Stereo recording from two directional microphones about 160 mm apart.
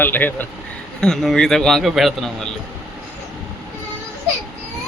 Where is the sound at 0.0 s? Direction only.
10° left (ahead or behind).